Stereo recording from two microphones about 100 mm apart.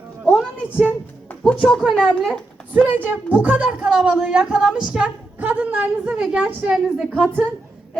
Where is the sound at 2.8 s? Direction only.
20° right (ahead or behind).